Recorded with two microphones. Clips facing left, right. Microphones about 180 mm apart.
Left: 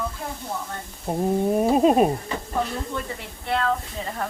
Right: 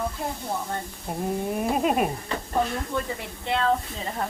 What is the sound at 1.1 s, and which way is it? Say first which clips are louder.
Speech: left 6 dB; 35° left (ahead or behind).